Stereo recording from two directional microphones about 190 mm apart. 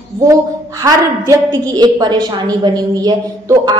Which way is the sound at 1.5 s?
20° right (ahead or behind).